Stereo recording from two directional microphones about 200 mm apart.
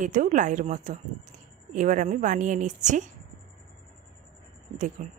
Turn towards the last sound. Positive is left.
turn(degrees=-35)  # may be behind; listen again after turning